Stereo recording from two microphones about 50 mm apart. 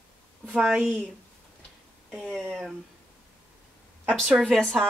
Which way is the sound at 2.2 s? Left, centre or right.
Centre.